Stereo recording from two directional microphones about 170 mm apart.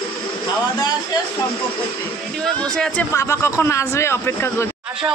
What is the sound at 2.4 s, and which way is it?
Speech, 5° left (ahead or behind).